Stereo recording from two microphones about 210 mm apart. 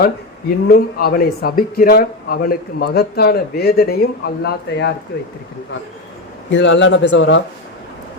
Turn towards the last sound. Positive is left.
turn(degrees=60)  # may be behind; listen again after turning